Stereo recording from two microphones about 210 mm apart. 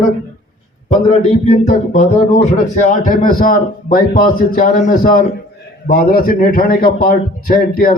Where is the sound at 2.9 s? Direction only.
40° left (ahead or behind).